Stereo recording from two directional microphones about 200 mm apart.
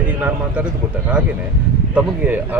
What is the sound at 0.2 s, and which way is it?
A man's voice, 10° right (ahead or behind).